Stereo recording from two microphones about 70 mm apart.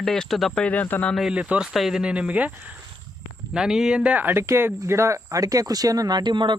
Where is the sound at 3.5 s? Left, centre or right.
Centre.